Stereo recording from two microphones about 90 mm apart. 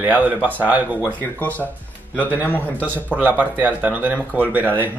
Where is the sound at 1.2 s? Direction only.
20° left (ahead or behind).